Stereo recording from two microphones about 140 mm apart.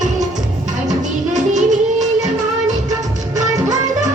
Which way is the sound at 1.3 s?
60° right (ahead or behind).